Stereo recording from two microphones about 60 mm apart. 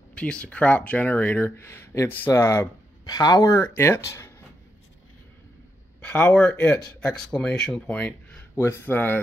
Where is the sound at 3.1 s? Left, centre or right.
Left.